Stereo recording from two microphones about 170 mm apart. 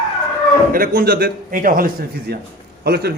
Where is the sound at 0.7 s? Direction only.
60° right (ahead or behind).